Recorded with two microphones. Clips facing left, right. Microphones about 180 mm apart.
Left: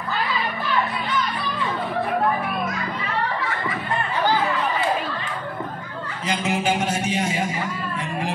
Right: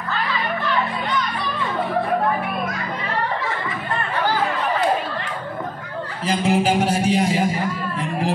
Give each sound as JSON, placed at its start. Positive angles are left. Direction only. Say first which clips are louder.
{"t": 6.2, "sound": "a man's voice", "louder": "right 4 dB", "side_deg": -35}